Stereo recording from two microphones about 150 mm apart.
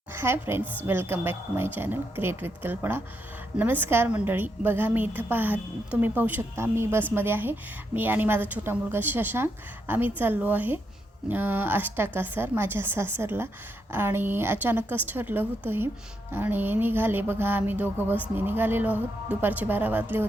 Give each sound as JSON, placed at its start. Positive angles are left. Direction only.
{"t": 0.1, "sound": "a woman's voice", "side_deg": -15}